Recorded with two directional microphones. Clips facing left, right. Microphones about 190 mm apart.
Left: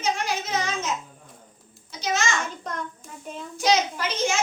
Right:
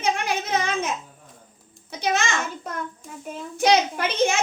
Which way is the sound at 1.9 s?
60° right (ahead or behind).